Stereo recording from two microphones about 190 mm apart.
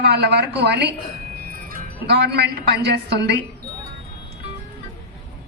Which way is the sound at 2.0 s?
60° right (ahead or behind).